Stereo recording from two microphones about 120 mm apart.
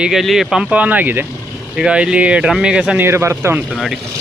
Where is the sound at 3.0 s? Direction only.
20° right (ahead or behind).